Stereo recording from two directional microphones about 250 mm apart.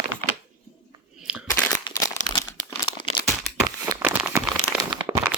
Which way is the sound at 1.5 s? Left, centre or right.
Centre.